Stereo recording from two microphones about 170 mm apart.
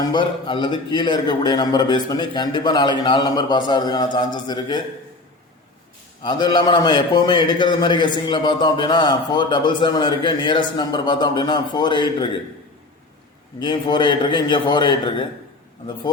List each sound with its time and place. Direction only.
0.1 s a man's voice: 30° left (ahead or behind)
6.2 s a man's voice: 25° left (ahead or behind)
13.6 s a man's voice: 30° left (ahead or behind)